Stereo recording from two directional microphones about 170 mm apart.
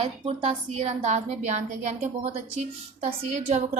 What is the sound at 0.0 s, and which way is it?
A woman's voice, 35° right (ahead or behind).